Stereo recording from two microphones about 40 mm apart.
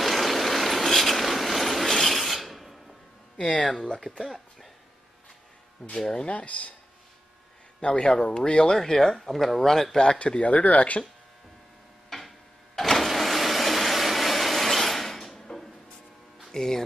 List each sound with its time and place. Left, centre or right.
0.0 s vehicle: centre
3.7 s speech: centre
4.2 s speech: centre
5.9 s speech: left
7.8 s speech: left; by 9.9 s centre
10.1 s speech: left
12.7 s vehicle: centre
16.5 s speech: centre